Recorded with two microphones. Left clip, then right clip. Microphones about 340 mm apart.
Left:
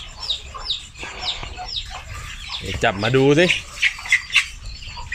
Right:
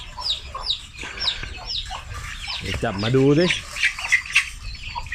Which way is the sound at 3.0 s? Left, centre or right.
Left.